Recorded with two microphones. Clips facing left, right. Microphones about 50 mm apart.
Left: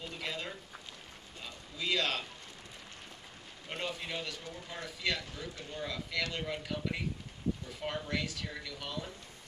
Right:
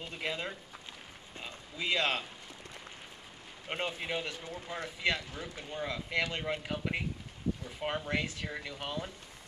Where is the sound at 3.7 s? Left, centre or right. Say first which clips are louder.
Right 3 dB; right.